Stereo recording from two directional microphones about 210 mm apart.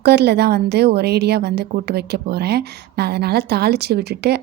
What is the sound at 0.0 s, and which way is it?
A woman's voice, 50° right (ahead or behind).